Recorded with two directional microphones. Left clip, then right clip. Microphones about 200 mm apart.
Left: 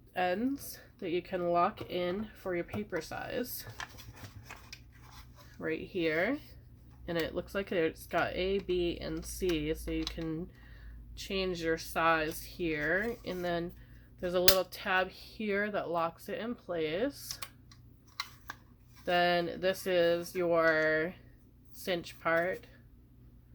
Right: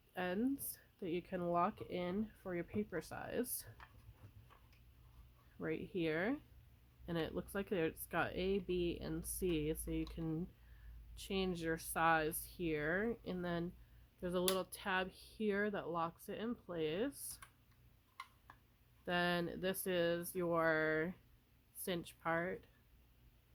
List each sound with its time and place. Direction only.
0.1 s speech: 50° right (ahead or behind)
5.5 s speech: 50° right (ahead or behind)
19.0 s speech: 50° right (ahead or behind)